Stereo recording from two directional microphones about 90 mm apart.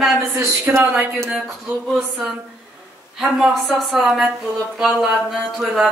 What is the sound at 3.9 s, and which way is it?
Speech, 5° right (ahead or behind).